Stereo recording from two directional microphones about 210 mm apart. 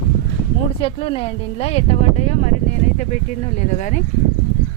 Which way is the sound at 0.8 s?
25° left (ahead or behind).